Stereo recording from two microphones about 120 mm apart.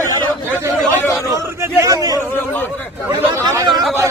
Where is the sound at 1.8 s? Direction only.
30° right (ahead or behind).